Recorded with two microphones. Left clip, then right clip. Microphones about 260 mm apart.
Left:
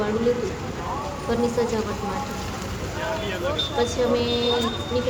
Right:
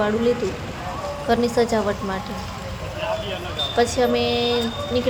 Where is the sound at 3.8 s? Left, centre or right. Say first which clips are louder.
Right 5 dB; centre.